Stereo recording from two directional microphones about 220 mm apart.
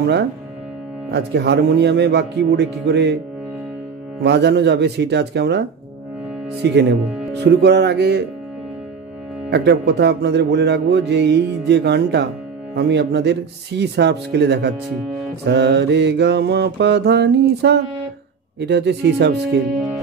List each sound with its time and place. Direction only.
1.1 s speech: 50° right (ahead or behind)
4.2 s speech: 50° right (ahead or behind)
9.5 s speech: 50° right (ahead or behind)